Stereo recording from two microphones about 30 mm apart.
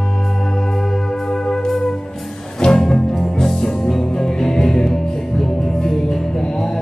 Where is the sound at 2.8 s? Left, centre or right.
Centre.